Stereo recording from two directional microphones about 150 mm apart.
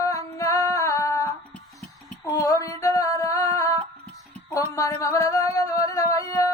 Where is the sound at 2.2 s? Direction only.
25° left (ahead or behind).